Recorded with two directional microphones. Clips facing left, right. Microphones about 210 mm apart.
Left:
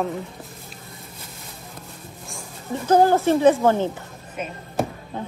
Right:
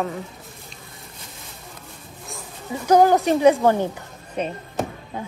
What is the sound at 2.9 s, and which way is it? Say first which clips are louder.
Speech: right 1 dB; 15° right (ahead or behind).